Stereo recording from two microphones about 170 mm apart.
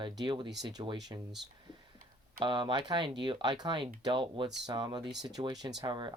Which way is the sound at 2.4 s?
30° right (ahead or behind).